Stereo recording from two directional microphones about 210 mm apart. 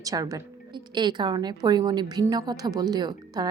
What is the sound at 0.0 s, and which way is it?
A woman's voice, 15° right (ahead or behind).